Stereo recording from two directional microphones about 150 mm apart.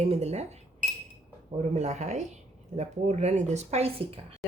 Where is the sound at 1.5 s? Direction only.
50° right (ahead or behind).